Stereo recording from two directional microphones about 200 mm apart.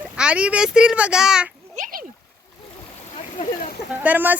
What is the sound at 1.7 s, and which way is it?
Splash, 40° right (ahead or behind).